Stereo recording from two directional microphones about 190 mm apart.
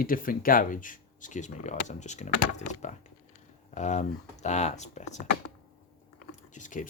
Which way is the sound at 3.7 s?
40° left (ahead or behind).